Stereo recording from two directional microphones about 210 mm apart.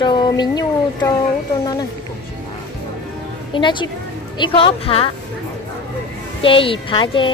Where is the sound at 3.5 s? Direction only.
20° left (ahead or behind).